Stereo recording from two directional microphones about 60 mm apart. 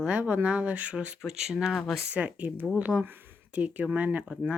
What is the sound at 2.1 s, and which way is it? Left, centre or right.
Speech, right.